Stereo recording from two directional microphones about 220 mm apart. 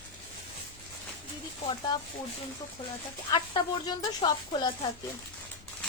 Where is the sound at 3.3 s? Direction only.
20° left (ahead or behind).